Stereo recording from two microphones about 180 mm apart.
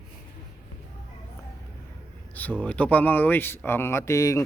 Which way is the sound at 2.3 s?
10° left (ahead or behind).